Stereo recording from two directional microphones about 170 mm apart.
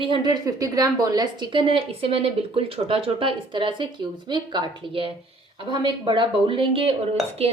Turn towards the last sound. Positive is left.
turn(degrees=-35)  # may be behind; listen again after turning